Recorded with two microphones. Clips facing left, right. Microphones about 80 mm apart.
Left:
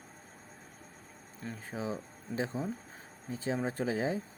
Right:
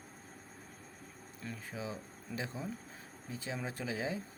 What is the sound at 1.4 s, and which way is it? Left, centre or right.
Speech, left.